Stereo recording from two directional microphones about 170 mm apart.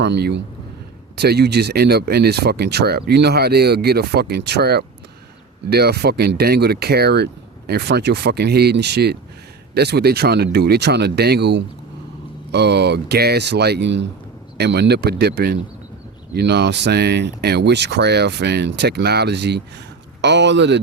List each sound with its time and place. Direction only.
0.0 s speech: 80° right
1.1 s speech: 70° right (ahead or behind); by 14.1 s 90° right
14.6 s speech: 75° right (ahead or behind)